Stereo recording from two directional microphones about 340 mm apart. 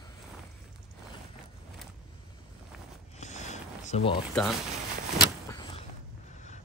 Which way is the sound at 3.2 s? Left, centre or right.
Centre.